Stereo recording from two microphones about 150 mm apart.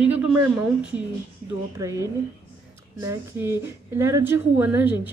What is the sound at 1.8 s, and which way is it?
A woman's voice, 20° right (ahead or behind).